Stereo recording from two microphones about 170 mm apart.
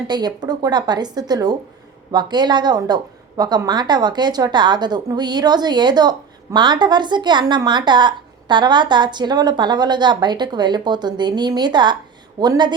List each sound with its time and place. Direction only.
0.1 s a woman's voice: 25° right (ahead or behind)